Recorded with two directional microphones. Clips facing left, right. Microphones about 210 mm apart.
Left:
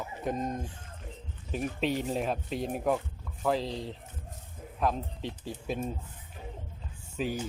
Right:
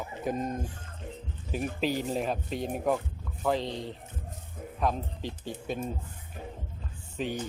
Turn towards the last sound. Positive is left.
turn(degrees=5)  # may be behind; listen again after turning